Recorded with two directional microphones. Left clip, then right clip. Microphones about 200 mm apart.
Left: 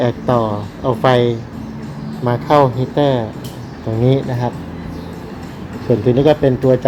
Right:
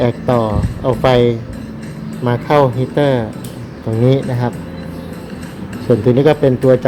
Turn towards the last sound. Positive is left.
turn(degrees=-20)  # may be behind; listen again after turning